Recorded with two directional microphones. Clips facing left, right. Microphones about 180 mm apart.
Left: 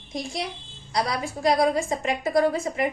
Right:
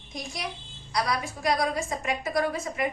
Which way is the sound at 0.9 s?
25° left (ahead or behind).